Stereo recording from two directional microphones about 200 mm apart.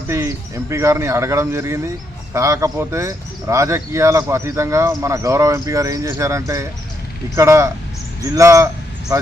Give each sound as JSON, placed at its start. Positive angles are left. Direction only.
{"t": 0.1, "sound": "speech", "side_deg": -15}